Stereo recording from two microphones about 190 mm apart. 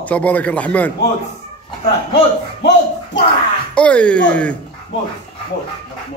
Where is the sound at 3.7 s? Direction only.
5° left (ahead or behind).